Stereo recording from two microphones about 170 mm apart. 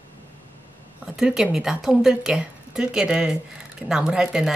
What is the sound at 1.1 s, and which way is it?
Speech, 5° right (ahead or behind).